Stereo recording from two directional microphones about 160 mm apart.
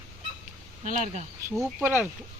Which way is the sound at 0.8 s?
50° right (ahead or behind).